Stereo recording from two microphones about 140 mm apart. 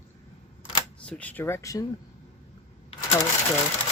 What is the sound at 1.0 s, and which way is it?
Speech, 10° left (ahead or behind).